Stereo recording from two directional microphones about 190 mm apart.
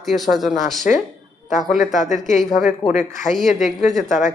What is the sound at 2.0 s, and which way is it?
Speech, 40° left (ahead or behind).